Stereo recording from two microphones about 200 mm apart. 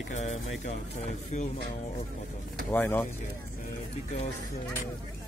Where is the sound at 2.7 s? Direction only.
10° left (ahead or behind).